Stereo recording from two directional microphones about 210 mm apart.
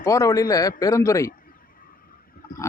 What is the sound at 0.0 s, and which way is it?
Speech, 15° left (ahead or behind).